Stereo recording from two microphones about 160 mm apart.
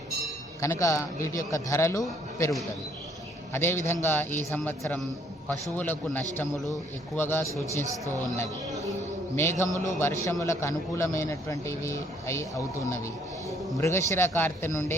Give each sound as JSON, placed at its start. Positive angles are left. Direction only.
{"t": 0.6, "sound": "a man's voice", "side_deg": 20}
{"t": 3.5, "sound": "a man's voice", "side_deg": 15}
{"t": 9.3, "sound": "a man's voice", "side_deg": 15}